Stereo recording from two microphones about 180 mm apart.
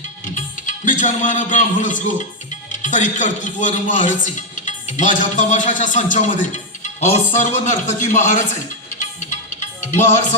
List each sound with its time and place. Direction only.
0.3 s music: 45° left (ahead or behind)
2.8 s a man's voice: 45° left (ahead or behind)
9.9 s music: 40° left (ahead or behind)